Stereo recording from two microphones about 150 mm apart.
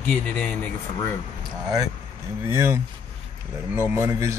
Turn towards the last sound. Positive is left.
turn(degrees=-20)  # may be behind; listen again after turning